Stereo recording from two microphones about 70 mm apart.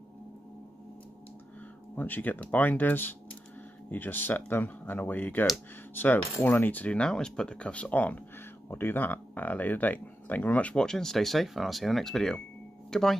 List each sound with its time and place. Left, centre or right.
2.0 s speech: left; by 13.2 s centre